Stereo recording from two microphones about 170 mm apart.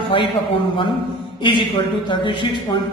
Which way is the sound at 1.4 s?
30° left (ahead or behind).